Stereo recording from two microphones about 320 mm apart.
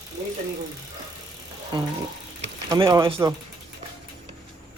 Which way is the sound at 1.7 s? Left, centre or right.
Centre.